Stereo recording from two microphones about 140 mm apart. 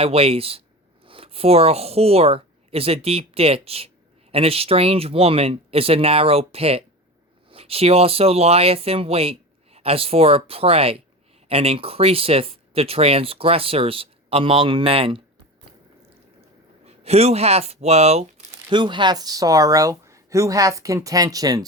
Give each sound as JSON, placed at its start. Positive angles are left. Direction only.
{"t": 0.0, "sound": "speech", "side_deg": -45}
{"t": 16.8, "sound": "speech", "side_deg": -50}
{"t": 18.7, "sound": "speech", "side_deg": -35}